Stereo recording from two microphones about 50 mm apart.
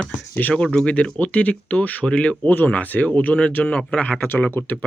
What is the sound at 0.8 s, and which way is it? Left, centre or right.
Speech, left.